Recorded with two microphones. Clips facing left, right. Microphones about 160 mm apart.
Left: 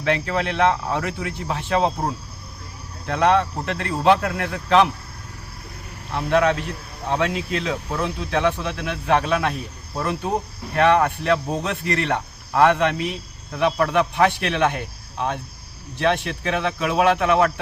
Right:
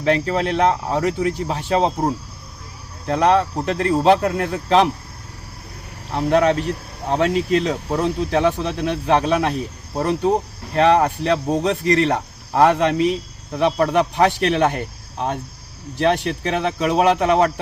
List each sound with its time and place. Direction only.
0.0 s speech: 35° right (ahead or behind)
3.1 s speech: 35° right (ahead or behind)
6.1 s speech: 35° right (ahead or behind)